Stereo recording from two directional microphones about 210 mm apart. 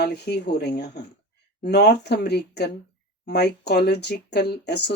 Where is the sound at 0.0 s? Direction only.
50° left (ahead or behind).